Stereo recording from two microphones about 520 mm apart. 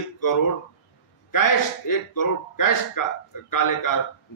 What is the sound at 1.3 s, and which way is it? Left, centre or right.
A man's voice, left.